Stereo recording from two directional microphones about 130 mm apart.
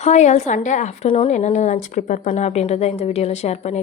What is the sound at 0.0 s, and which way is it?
Speech, 60° left (ahead or behind).